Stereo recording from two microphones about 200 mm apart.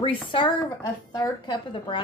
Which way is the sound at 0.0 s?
25° left (ahead or behind).